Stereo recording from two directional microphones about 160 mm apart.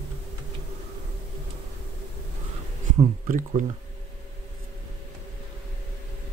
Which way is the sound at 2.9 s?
55° right (ahead or behind).